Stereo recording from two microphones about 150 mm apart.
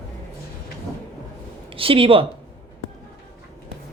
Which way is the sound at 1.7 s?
35° right (ahead or behind).